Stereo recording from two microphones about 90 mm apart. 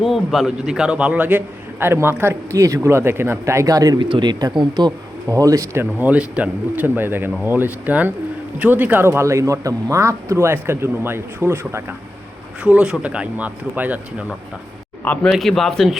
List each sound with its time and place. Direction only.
0.0 s a man's voice: centre (ahead or behind); by 4.0 s 45° right (ahead or behind)
4.1 s speech: 55° right (ahead or behind)
4.9 s speech: 40° right (ahead or behind)
5.8 s a man's voice: 20° right (ahead or behind)
12.6 s speech: 10° right (ahead or behind)
15.0 s a man's voice: 15° left (ahead or behind)
15.3 s a man's voice: centre (ahead or behind)